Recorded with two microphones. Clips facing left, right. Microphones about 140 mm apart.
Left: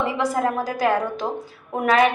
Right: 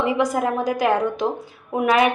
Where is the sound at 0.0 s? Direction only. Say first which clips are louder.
Right 2 dB; 15° right (ahead or behind).